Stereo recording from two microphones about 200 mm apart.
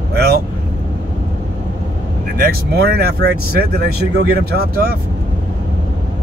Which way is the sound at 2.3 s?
50° right (ahead or behind).